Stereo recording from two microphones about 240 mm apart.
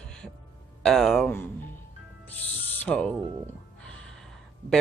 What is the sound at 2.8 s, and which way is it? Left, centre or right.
Speech, centre.